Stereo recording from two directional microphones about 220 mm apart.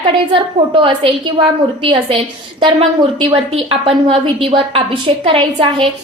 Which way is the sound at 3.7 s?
25° right (ahead or behind).